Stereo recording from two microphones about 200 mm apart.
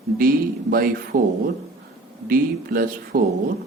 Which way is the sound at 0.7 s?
45° right (ahead or behind).